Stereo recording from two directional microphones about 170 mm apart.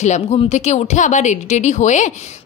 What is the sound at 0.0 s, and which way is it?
Speech, 45° left (ahead or behind).